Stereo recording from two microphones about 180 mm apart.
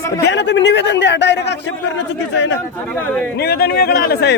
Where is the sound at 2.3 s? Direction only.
90° left.